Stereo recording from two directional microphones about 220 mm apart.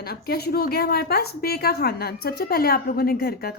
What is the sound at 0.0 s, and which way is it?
A woman's voice, 45° left (ahead or behind).